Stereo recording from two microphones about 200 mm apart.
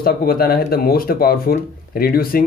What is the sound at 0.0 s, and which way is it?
Speech, 50° left (ahead or behind).